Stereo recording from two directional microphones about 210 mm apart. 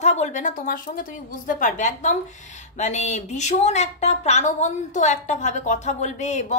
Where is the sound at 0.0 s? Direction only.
35° left (ahead or behind).